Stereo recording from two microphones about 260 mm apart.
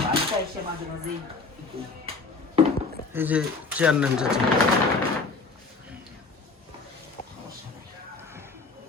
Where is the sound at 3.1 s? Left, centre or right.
Centre.